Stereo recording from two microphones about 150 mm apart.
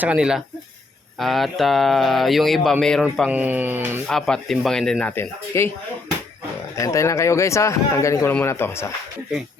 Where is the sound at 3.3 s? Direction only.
10° right (ahead or behind).